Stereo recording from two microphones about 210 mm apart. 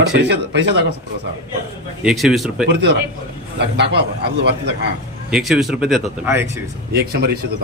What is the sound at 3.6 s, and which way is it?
A man's voice, 55° right (ahead or behind).